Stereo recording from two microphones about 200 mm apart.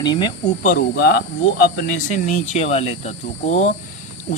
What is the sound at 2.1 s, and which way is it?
Speech, 35° left (ahead or behind).